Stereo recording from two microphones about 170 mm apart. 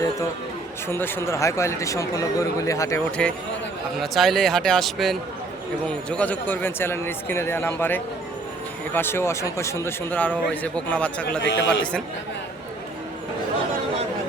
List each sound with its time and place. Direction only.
0.9 s a man's voice: 15° left (ahead or behind)
3.2 s a man's voice: 5° left (ahead or behind)
11.4 s a man's voice: 90° left